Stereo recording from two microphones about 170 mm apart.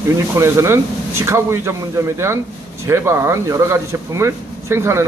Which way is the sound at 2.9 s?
15° right (ahead or behind).